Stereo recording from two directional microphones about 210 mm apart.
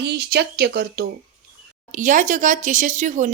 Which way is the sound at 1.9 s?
35° right (ahead or behind).